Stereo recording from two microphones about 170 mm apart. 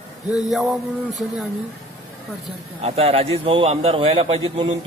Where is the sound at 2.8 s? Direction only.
35° right (ahead or behind).